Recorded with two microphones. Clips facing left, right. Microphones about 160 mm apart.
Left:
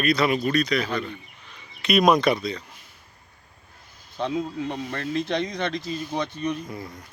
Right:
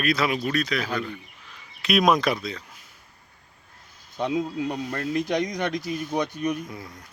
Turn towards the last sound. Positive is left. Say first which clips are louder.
# left 3 dB
turn(degrees=0)  # may be behind; listen again after turning